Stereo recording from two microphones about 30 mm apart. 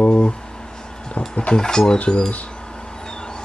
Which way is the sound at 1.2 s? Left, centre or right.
Left.